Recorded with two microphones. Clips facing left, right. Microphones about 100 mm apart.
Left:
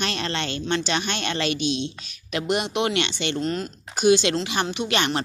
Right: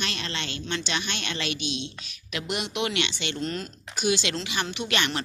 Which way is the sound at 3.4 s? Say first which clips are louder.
Left 2 dB; 25° left (ahead or behind).